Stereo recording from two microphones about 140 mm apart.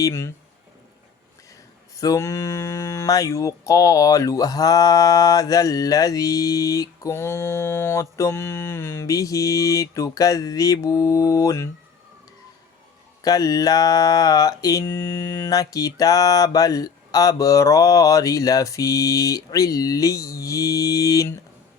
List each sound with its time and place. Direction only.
0.0 s speech: 20° left (ahead or behind)
2.0 s speech: 20° left (ahead or behind)
13.2 s speech: 25° left (ahead or behind)